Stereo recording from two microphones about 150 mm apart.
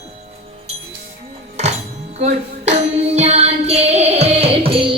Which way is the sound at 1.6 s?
45° right (ahead or behind).